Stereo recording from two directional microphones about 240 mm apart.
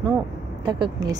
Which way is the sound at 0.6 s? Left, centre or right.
Centre.